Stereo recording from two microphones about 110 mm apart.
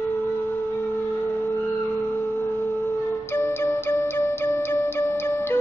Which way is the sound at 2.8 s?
20° left (ahead or behind).